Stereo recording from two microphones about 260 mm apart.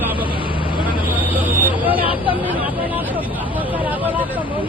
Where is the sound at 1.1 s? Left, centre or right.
Centre.